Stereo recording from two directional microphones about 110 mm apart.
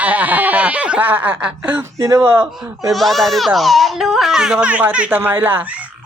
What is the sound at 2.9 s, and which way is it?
Speech, centre (ahead or behind).